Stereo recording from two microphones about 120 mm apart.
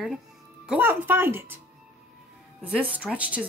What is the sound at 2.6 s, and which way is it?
Speech, 10° right (ahead or behind).